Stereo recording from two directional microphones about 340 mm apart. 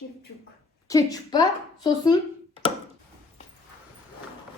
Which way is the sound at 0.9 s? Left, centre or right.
Centre.